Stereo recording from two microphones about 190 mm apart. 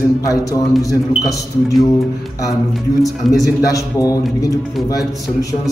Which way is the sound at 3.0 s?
20° left (ahead or behind).